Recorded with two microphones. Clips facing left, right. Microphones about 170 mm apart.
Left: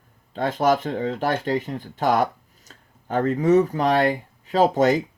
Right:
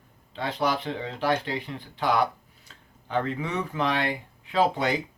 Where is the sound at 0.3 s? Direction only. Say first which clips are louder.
Left 7 dB; 45° left (ahead or behind).